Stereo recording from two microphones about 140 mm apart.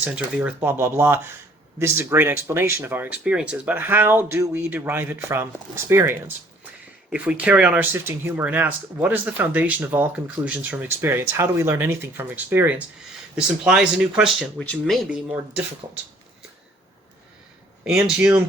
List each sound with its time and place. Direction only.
0.0 s speech: 10° right (ahead or behind); by 15.0 s 5° left (ahead or behind)
15.8 s speech: 30° right (ahead or behind)
17.8 s speech: 5° right (ahead or behind)